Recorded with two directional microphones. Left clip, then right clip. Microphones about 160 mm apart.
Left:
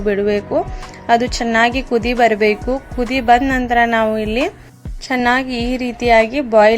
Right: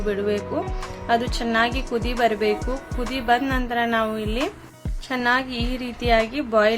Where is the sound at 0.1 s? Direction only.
40° left (ahead or behind).